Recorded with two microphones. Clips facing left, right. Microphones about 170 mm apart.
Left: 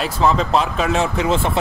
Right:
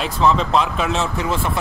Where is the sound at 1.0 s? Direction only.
20° left (ahead or behind).